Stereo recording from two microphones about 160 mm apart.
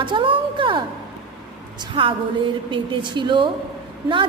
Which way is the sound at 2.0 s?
30° right (ahead or behind).